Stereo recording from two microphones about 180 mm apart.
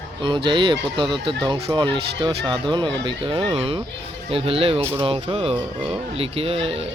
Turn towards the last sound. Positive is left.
turn(degrees=-35)  # may be behind; listen again after turning